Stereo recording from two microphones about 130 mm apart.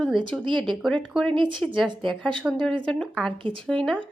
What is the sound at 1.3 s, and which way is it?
Speech, 40° right (ahead or behind).